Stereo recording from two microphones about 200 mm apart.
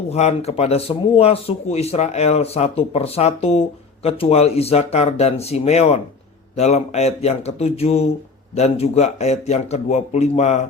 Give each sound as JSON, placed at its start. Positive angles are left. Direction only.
{"t": 0.1, "sound": "speech", "side_deg": 30}